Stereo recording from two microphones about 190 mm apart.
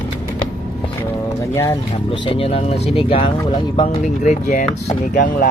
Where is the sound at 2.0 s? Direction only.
25° left (ahead or behind).